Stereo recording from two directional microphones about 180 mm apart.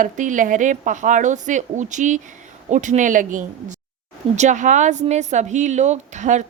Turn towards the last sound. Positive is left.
turn(degrees=-40)  # may be behind; listen again after turning